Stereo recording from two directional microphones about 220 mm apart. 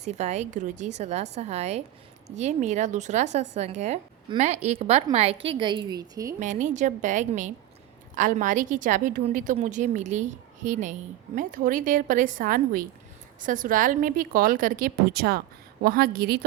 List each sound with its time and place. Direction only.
0.0 s a woman's voice: 30° right (ahead or behind)
6.4 s a woman's voice: 35° right (ahead or behind)